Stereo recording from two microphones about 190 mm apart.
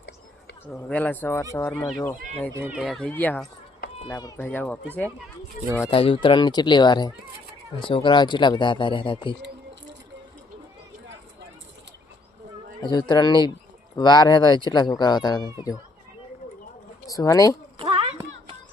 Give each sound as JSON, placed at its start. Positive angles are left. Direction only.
{"t": 0.7, "sound": "speech", "side_deg": 5}
{"t": 2.7, "sound": "speech", "side_deg": 0}
{"t": 5.9, "sound": "speech", "side_deg": 30}
{"t": 12.8, "sound": "speech", "side_deg": 20}
{"t": 17.1, "sound": "speech", "side_deg": 20}
{"t": 17.7, "sound": "a sound", "side_deg": -30}